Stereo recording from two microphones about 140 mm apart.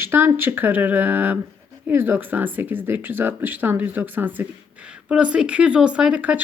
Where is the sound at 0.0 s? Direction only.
15° right (ahead or behind).